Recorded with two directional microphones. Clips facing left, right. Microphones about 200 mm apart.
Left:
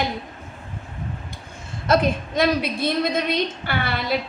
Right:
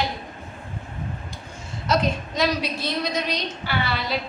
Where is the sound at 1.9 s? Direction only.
55° left (ahead or behind).